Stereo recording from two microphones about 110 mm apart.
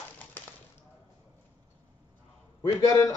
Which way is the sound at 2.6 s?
30° left (ahead or behind).